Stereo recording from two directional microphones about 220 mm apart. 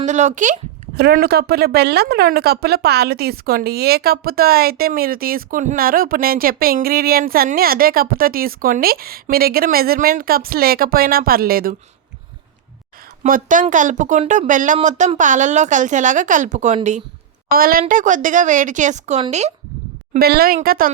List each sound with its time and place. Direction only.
0.0 s a woman's voice: 35° right (ahead or behind)
13.2 s speech: 40° right (ahead or behind)
20.1 s speech: 45° right (ahead or behind)